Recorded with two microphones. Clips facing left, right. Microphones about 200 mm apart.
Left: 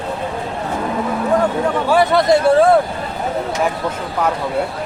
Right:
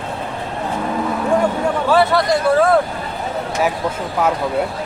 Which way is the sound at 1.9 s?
20° left (ahead or behind).